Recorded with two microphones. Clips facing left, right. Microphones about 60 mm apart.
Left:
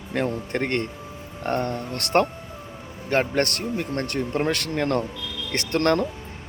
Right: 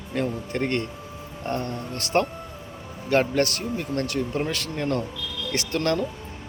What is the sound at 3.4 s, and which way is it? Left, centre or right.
Speech, left.